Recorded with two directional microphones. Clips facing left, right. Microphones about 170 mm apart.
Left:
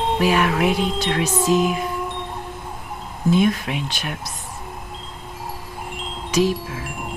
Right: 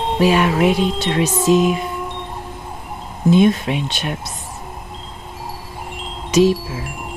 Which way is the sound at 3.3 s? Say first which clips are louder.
Right 5 dB; 25° right (ahead or behind).